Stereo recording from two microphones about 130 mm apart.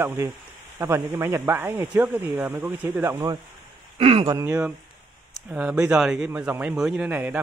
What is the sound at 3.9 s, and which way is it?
Speech, 50° right (ahead or behind).